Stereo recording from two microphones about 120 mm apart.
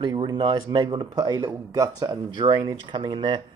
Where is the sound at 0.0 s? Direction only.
40° right (ahead or behind).